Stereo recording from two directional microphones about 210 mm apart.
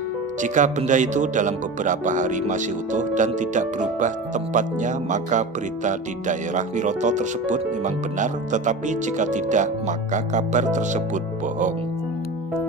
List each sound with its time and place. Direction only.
0.4 s speech: 35° right (ahead or behind)